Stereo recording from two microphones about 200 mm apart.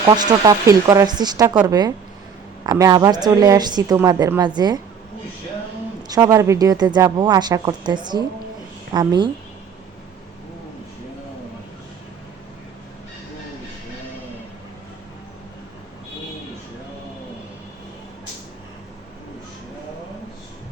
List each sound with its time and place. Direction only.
0.1 s speech: 20° right (ahead or behind)
6.1 s speech: 15° right (ahead or behind)